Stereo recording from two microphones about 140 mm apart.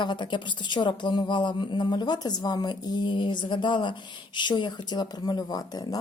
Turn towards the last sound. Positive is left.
turn(degrees=25)  # may be behind; listen again after turning